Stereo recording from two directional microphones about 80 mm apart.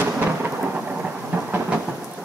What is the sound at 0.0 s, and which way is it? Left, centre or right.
Thunder, right.